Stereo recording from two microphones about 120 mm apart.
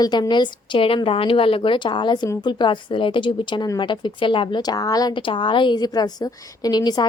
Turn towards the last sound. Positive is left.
turn(degrees=35)  # may be behind; listen again after turning